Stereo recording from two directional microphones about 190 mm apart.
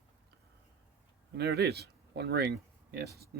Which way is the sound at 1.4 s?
60° right (ahead or behind).